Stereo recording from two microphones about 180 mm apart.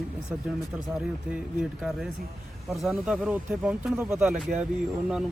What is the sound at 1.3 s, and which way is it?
Speech, 5° right (ahead or behind).